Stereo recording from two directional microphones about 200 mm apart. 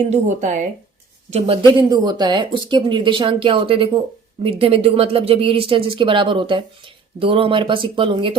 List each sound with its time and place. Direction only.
0.1 s speech: 35° right (ahead or behind)